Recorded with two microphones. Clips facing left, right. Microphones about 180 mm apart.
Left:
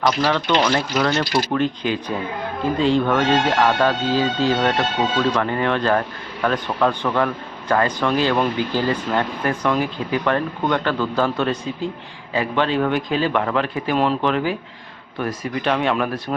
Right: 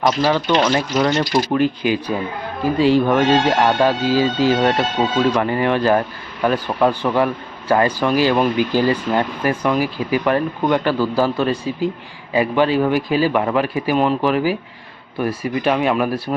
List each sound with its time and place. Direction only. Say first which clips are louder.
0.2 s speech: right 2 dB; 10° right (ahead or behind)
1.5 s speech: right 4 dB; 10° right (ahead or behind)
15.6 s speech: right 3 dB; 10° right (ahead or behind)